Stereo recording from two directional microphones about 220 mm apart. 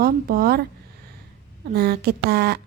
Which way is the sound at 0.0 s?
40° right (ahead or behind).